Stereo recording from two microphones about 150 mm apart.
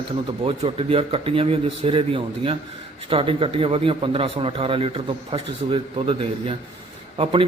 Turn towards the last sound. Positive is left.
turn(degrees=-40)  # may be behind; listen again after turning